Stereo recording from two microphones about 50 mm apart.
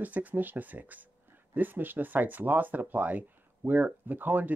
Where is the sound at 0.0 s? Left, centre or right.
Right.